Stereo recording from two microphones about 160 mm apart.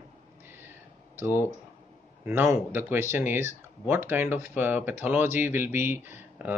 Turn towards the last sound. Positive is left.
turn(degrees=-10)  # may be behind; listen again after turning